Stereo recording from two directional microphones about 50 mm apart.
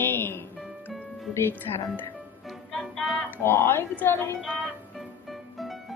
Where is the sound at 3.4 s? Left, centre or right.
Left.